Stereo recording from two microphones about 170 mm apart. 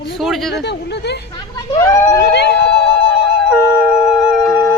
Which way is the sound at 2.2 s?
80° left.